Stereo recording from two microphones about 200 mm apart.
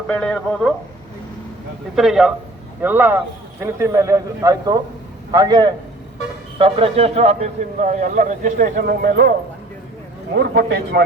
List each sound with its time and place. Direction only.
0.1 s speech: 5° left (ahead or behind)
2.0 s a man's voice: centre (ahead or behind); by 9.3 s 60° right (ahead or behind)
10.3 s a man's voice: 55° right (ahead or behind)